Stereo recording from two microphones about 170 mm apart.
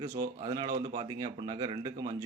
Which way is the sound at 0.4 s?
25° right (ahead or behind).